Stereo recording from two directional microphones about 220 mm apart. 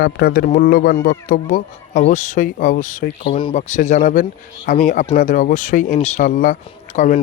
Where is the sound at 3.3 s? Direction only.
25° left (ahead or behind).